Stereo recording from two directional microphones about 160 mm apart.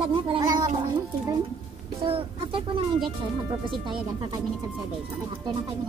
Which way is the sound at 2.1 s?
35° right (ahead or behind).